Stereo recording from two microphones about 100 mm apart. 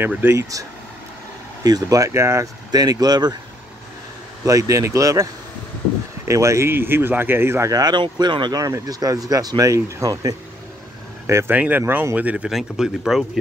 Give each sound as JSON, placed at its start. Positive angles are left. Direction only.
{"t": 0.3, "sound": "speech", "side_deg": -30}
{"t": 2.7, "sound": "speech", "side_deg": -40}
{"t": 4.5, "sound": "speech", "side_deg": -35}
{"t": 7.7, "sound": "speech", "side_deg": -45}
{"t": 11.5, "sound": "speech", "side_deg": -15}
{"t": 12.4, "sound": "speech", "side_deg": -5}